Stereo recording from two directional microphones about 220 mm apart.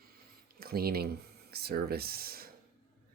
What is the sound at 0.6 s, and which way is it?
Speech, 45° right (ahead or behind).